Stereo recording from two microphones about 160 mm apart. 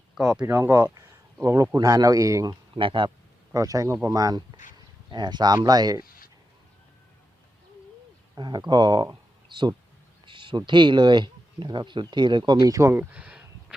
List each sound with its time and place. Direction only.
0.2 s speech: 5° right (ahead or behind)
0.4 s speech: 15° right (ahead or behind)
0.9 s a sound: 20° right (ahead or behind)
1.7 s speech: 20° right (ahead or behind)
3.5 s speech: 20° right (ahead or behind)
6.0 s a sound: 65° left (ahead or behind)
8.4 s speech: 25° right (ahead or behind)
10.2 s a sound: 30° right (ahead or behind)
10.7 s speech: 30° right (ahead or behind); by 13.7 s 10° right (ahead or behind)